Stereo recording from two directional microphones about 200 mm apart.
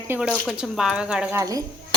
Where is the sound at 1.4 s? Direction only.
15° right (ahead or behind).